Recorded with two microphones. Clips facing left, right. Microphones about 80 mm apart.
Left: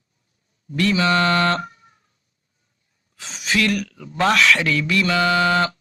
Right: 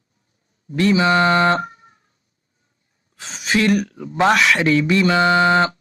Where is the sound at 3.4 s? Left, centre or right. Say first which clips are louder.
Right 4 dB; right.